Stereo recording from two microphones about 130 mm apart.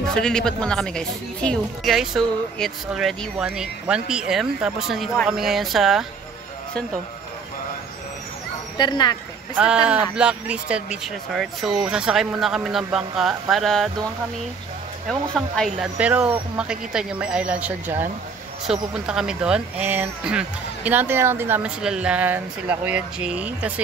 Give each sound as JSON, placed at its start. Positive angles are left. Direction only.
{"t": 0.1, "sound": "a woman's voice", "side_deg": 5}
{"t": 8.7, "sound": "speech", "side_deg": 35}
{"t": 9.6, "sound": "a woman's voice", "side_deg": -5}
{"t": 15.0, "sound": "a woman's voice", "side_deg": 0}
{"t": 16.0, "sound": "speech", "side_deg": -10}